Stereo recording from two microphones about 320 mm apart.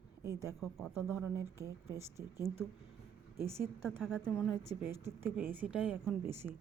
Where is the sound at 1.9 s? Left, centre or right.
Centre.